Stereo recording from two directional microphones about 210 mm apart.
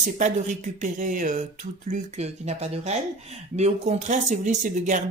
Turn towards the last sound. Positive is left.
turn(degrees=-35)  # may be behind; listen again after turning